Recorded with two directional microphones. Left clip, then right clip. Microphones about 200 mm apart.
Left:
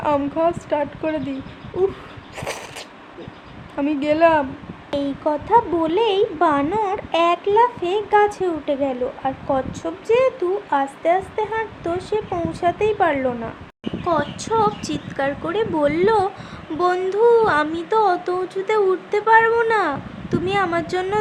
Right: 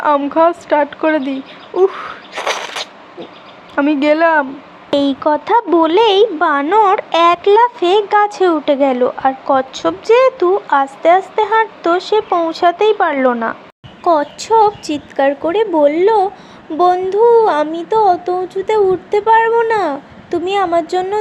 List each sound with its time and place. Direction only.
0.0 s a woman's voice: 15° right (ahead or behind)
2.3 s a sound: 15° right (ahead or behind)
3.8 s speech: 20° right (ahead or behind)
14.0 s speech: 35° right (ahead or behind); by 21.2 s 15° right (ahead or behind)